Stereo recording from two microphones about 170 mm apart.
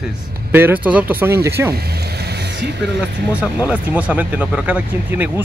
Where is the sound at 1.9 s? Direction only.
75° right (ahead or behind).